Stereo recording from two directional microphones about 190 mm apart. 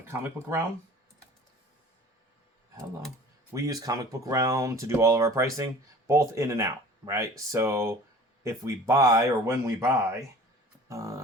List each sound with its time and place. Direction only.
0.1 s speech: 10° right (ahead or behind)
3.5 s speech: 15° right (ahead or behind)
10.8 s a sound: 15° right (ahead or behind)